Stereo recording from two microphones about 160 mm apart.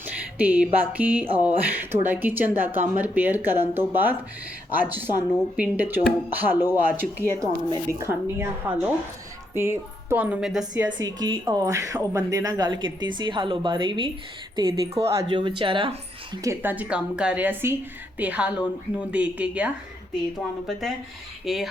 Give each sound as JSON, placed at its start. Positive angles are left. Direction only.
{"t": 0.0, "sound": "speech", "side_deg": -10}
{"t": 10.9, "sound": "speech", "side_deg": -25}
{"t": 15.3, "sound": "speech", "side_deg": -30}
{"t": 16.4, "sound": "speech", "side_deg": -15}
{"t": 21.4, "sound": "speech", "side_deg": 0}